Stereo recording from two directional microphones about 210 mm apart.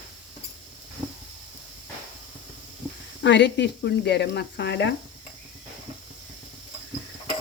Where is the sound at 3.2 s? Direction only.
55° left (ahead or behind).